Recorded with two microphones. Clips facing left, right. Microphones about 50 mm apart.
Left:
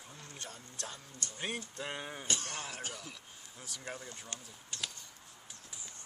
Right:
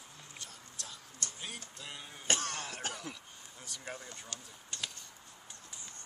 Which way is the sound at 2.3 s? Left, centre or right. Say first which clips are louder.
Right 6 dB; right.